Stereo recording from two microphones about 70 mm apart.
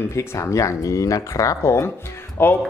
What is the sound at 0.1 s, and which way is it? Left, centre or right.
Speech, left.